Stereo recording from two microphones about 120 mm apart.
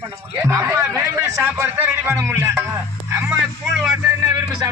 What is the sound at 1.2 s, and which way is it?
Speech, 10° right (ahead or behind).